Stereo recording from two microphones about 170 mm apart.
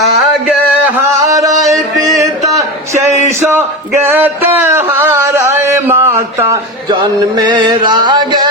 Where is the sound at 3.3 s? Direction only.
15° right (ahead or behind).